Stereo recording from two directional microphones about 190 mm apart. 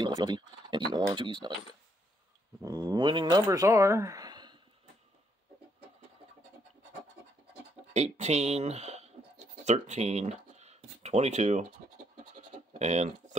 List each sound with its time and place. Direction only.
0.0 s speech: 20° right (ahead or behind)
2.6 s speech: 20° right (ahead or behind)
7.9 s a sound: 35° right (ahead or behind)
12.4 s bleat: 40° right (ahead or behind)